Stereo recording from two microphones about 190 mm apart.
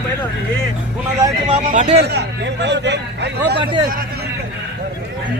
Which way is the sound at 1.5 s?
40° right (ahead or behind).